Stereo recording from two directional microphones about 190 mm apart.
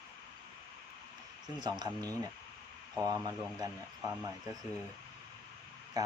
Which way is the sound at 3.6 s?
20° right (ahead or behind).